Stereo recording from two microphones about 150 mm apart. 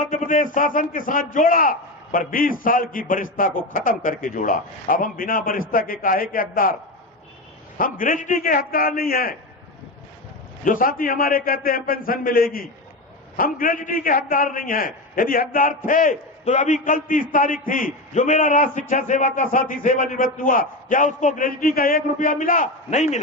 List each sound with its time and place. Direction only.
0.0 s a man's voice: 60° left (ahead or behind)
7.8 s a man's voice: 65° left (ahead or behind)
10.6 s a man's voice: 65° left (ahead or behind)